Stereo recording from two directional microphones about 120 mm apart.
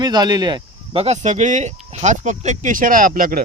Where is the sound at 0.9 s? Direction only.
70° right (ahead or behind); by 2.8 s 90° right.